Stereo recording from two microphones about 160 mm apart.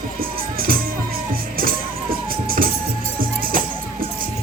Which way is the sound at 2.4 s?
65° right (ahead or behind).